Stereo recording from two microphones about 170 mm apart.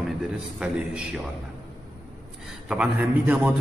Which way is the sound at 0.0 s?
5° right (ahead or behind).